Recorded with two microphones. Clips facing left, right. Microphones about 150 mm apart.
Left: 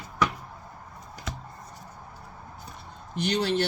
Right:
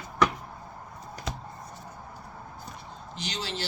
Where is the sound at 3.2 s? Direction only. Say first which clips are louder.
Left 10 dB; 60° left (ahead or behind).